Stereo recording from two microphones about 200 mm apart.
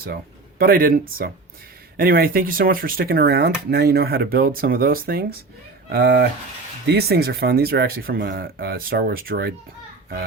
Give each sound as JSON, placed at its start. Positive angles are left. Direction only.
{"t": 0.6, "sound": "speech", "side_deg": -45}